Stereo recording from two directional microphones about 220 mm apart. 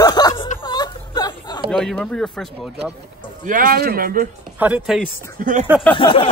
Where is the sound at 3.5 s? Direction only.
40° right (ahead or behind).